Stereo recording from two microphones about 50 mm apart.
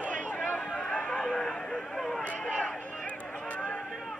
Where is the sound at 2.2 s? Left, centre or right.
Left.